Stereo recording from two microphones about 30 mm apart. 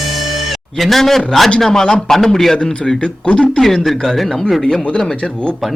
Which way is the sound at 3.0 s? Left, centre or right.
Left.